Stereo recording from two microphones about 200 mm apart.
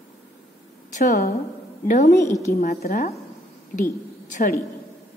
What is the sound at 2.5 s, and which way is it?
Speech, 45° left (ahead or behind).